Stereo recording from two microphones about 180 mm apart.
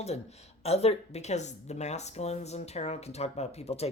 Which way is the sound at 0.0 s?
35° left (ahead or behind).